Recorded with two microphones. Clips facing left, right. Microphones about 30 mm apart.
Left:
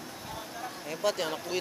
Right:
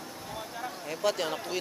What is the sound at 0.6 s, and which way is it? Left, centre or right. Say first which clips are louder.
Speech: right 1 dB; centre.